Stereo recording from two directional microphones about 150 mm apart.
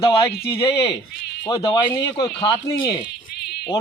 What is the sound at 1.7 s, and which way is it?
Speech, 25° left (ahead or behind).